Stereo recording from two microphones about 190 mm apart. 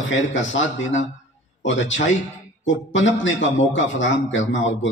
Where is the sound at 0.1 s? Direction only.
80° left.